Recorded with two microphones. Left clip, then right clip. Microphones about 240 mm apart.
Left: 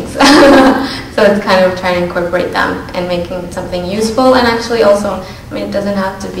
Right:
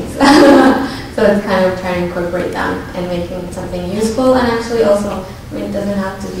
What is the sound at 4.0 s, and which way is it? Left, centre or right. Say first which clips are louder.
A woman's voice: left 3 dB; centre.